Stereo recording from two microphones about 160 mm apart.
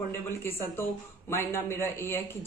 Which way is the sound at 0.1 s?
15° left (ahead or behind).